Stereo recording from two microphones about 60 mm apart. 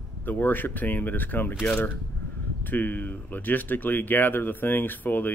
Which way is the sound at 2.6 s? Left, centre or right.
Left.